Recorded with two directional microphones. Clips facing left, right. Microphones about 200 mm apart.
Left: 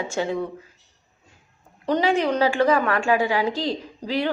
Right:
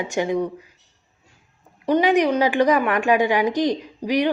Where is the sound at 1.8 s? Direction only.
15° right (ahead or behind).